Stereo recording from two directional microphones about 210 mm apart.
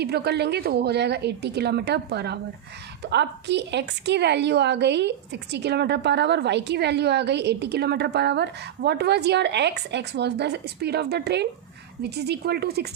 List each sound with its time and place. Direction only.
0.0 s a woman's voice: 50° right (ahead or behind)